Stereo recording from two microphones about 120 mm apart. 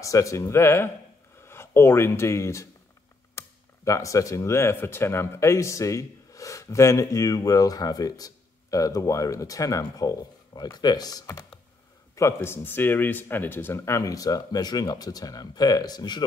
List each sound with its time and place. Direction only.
0.0 s speech: 25° left (ahead or behind)